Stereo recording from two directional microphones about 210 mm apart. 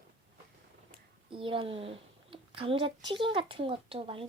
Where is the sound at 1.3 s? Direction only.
25° right (ahead or behind).